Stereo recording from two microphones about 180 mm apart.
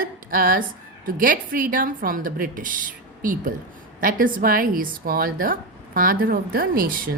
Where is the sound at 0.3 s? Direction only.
50° right (ahead or behind).